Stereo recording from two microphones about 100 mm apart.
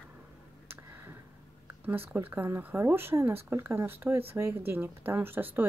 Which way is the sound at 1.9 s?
25° right (ahead or behind).